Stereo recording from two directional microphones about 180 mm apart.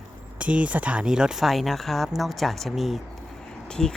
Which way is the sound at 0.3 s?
5° right (ahead or behind).